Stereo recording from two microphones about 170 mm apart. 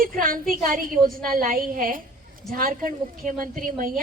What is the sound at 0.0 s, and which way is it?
Speech, 55° right (ahead or behind).